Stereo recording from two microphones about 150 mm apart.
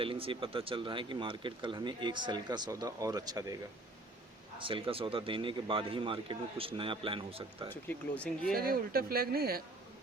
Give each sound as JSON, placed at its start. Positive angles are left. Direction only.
{"t": 0.0, "sound": "speech", "side_deg": -35}
{"t": 4.5, "sound": "speech", "side_deg": -35}
{"t": 7.7, "sound": "speech", "side_deg": 10}
{"t": 8.5, "sound": "speech", "side_deg": -80}